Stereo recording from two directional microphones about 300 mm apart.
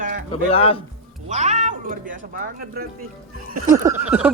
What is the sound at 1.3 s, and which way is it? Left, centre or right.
Speech, right.